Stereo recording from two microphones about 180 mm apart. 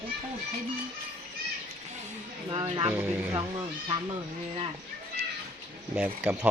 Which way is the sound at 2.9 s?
10° right (ahead or behind).